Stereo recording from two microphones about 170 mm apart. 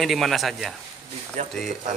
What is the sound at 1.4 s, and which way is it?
Speech, 45° right (ahead or behind).